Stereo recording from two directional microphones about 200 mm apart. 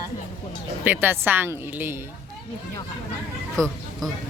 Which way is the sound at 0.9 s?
10° right (ahead or behind).